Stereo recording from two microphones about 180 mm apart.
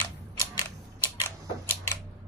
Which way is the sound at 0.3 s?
20° left (ahead or behind).